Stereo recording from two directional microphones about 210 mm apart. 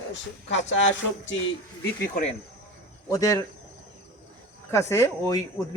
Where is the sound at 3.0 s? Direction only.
15° left (ahead or behind).